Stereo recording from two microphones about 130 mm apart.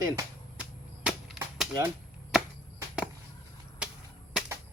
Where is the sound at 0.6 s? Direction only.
10° right (ahead or behind).